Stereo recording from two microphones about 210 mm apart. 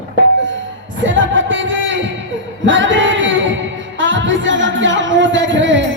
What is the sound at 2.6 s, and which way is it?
Music, 65° right (ahead or behind).